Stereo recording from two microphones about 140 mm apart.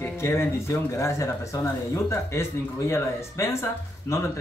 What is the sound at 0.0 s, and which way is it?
Speech, 15° left (ahead or behind).